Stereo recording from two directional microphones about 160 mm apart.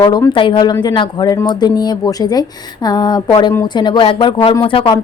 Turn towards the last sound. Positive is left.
turn(degrees=35)  # may be behind; listen again after turning